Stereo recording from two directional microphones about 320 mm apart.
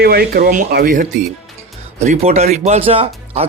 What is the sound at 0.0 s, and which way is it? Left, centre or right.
Speech, right.